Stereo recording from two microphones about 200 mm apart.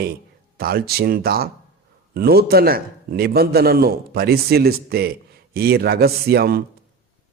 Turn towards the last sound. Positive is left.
turn(degrees=-50)  # may be behind; listen again after turning